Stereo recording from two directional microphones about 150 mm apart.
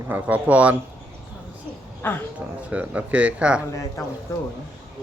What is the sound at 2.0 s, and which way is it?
Speech, 15° left (ahead or behind).